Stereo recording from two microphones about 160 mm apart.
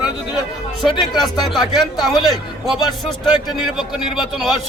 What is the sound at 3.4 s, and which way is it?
Speech, centre (ahead or behind).